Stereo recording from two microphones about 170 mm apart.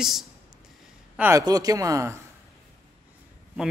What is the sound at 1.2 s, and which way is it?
Speech, 15° right (ahead or behind).